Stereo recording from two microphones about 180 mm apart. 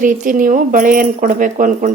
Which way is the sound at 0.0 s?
50° right (ahead or behind).